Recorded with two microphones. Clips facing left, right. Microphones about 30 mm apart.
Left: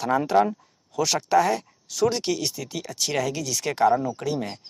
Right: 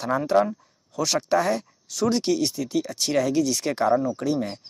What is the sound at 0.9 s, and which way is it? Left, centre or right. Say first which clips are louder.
Speech: left 2 dB; centre.